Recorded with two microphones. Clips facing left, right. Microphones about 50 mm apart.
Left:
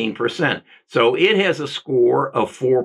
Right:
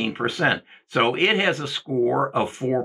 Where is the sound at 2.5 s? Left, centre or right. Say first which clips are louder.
Left 7 dB; left.